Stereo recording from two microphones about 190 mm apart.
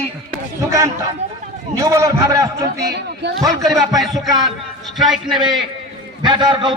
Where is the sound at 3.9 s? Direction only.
Centre (ahead or behind).